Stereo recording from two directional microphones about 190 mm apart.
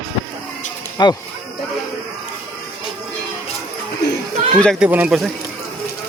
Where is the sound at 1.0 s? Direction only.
20° left (ahead or behind).